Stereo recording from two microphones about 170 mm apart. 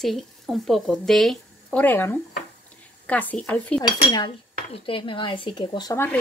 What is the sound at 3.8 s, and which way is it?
Speech, 25° left (ahead or behind).